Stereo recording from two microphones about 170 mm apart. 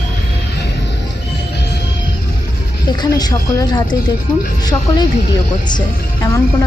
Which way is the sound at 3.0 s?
25° left (ahead or behind).